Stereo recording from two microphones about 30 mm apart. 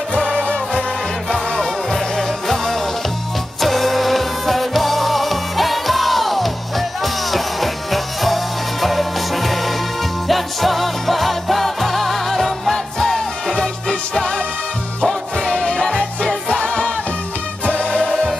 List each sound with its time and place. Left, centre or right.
1.6 s music: centre
15.5 s music: centre
17.6 s music: left